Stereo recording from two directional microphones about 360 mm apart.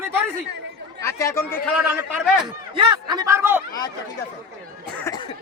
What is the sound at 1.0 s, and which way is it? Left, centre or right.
Speech, centre.